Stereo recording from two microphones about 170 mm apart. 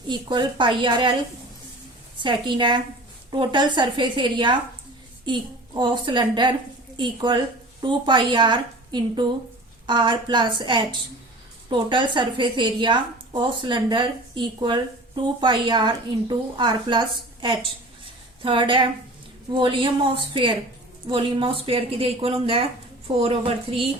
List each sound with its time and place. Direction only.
0.1 s a woman's voice: 25° right (ahead or behind)
2.1 s a woman's voice: 30° right (ahead or behind)